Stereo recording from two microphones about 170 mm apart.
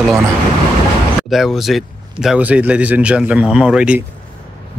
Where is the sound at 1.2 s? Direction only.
Centre (ahead or behind).